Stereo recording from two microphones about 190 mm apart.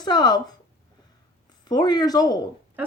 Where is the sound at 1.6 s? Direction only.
20° left (ahead or behind).